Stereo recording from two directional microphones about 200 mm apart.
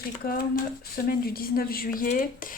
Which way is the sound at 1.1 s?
50° left (ahead or behind).